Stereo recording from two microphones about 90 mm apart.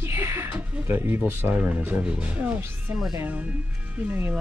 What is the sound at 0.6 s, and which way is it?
Speech, 25° right (ahead or behind).